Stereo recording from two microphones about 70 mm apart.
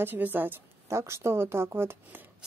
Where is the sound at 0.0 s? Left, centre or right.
Right.